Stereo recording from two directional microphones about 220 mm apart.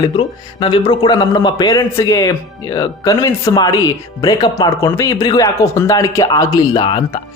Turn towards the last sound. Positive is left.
turn(degrees=25)  # may be behind; listen again after turning